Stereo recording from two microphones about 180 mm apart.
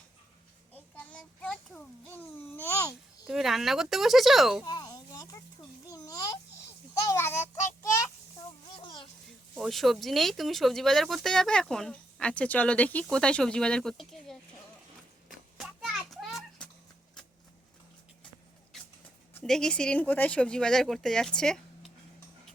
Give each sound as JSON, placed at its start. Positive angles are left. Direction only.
{"t": 0.7, "sound": "child singing", "side_deg": 10}
{"t": 3.2, "sound": "speech", "side_deg": 0}
{"t": 4.6, "sound": "a sound", "side_deg": 20}
{"t": 7.1, "sound": "child singing", "side_deg": 15}
{"t": 8.7, "sound": "sizzle", "side_deg": 25}
{"t": 9.6, "sound": "speech", "side_deg": 0}
{"t": 15.3, "sound": "children playing", "side_deg": 0}
{"t": 19.4, "sound": "speech", "side_deg": 5}